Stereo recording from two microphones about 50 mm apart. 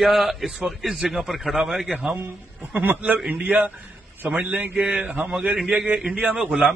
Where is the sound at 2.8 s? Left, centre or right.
Right.